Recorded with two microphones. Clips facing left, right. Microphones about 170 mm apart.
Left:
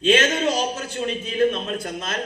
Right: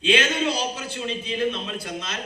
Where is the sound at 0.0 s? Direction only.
45° left (ahead or behind).